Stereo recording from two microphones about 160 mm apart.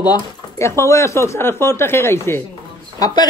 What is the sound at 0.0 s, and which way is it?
A man's voice, 20° left (ahead or behind).